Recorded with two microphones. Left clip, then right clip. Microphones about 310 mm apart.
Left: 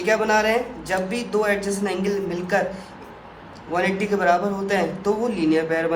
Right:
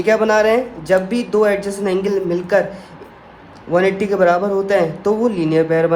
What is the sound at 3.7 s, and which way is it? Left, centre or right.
Speech, right.